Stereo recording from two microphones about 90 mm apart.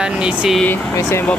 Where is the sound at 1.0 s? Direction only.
30° left (ahead or behind).